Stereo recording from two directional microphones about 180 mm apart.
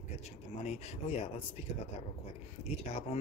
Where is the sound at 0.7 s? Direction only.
35° left (ahead or behind).